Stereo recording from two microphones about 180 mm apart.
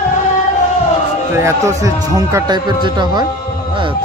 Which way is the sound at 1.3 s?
15° right (ahead or behind).